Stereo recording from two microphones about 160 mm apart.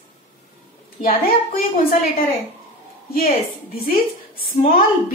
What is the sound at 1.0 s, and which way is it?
Speech, 60° left (ahead or behind).